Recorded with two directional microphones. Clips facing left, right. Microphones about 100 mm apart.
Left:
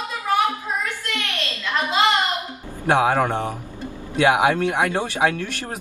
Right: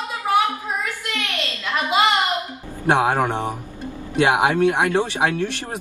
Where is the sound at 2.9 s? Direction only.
15° right (ahead or behind).